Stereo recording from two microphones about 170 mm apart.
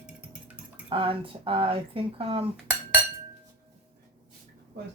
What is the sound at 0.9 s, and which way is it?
Speech, 30° right (ahead or behind).